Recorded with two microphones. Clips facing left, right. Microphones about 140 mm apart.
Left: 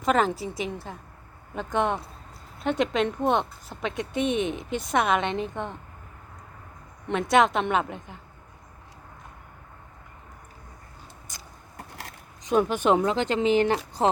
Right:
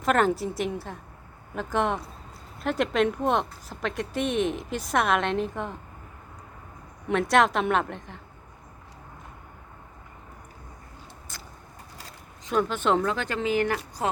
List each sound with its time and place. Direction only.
0.0 s speech: centre (ahead or behind)
7.1 s speech: centre (ahead or behind)
11.3 s vehicle: 15° left (ahead or behind)
11.8 s a sound: 70° left (ahead or behind)
12.4 s speech: 20° left (ahead or behind)